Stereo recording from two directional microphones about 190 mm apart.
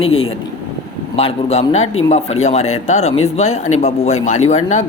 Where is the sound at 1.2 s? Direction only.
30° left (ahead or behind).